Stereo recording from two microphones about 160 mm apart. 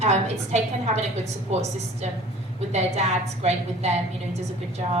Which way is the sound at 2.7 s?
45° right (ahead or behind).